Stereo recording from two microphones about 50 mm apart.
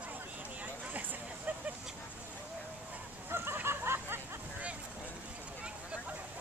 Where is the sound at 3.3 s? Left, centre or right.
Right.